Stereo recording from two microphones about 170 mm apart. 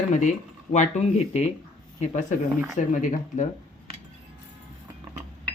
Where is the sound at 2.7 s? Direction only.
50° left (ahead or behind).